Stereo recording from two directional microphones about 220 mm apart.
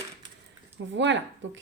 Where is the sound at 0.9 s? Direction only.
55° right (ahead or behind).